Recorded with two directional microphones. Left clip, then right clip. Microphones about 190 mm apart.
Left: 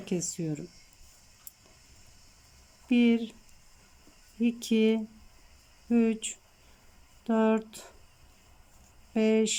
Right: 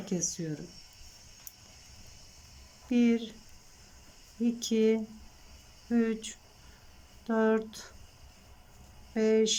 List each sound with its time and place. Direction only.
0.0 s speech: 10° left (ahead or behind)
2.9 s speech: 10° left (ahead or behind)
4.4 s speech: 10° left (ahead or behind)
9.1 s speech: 10° left (ahead or behind)